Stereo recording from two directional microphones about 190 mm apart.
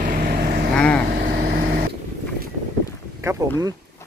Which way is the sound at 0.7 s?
5° left (ahead or behind).